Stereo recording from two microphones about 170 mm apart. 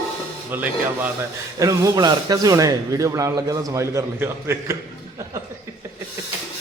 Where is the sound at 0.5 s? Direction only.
10° right (ahead or behind).